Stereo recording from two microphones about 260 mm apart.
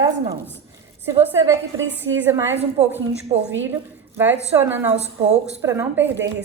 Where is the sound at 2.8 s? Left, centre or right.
Right.